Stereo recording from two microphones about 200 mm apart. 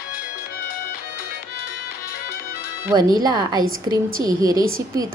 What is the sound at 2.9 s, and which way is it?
A woman's voice, 20° right (ahead or behind).